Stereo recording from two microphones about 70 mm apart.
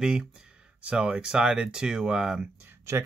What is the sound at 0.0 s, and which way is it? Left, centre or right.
Speech, centre.